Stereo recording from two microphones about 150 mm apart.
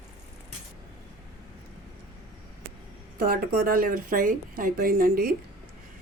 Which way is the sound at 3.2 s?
75° right (ahead or behind).